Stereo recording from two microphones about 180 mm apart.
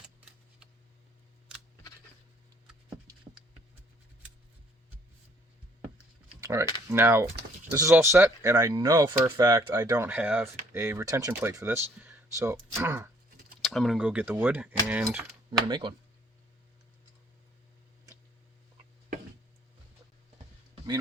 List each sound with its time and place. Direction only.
6.4 s typing: 15° right (ahead or behind)
6.8 s speech: 10° right (ahead or behind)
13.6 s speech: centre (ahead or behind)
15.7 s speech: 25° right (ahead or behind)